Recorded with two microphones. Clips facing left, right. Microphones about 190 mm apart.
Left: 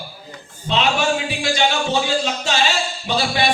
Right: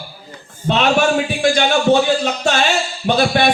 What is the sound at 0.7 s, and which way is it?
A man's voice, 55° right (ahead or behind).